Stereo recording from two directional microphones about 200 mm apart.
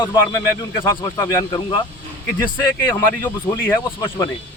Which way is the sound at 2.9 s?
10° left (ahead or behind).